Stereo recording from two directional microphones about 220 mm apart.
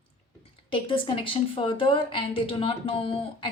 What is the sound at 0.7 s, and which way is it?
A woman's voice, 25° left (ahead or behind).